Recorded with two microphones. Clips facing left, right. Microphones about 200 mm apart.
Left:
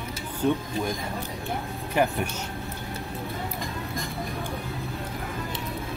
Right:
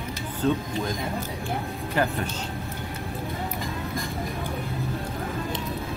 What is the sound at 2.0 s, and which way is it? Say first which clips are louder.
Speech: left 2 dB; 15° left (ahead or behind).